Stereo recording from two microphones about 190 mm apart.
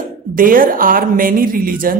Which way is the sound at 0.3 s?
45° right (ahead or behind).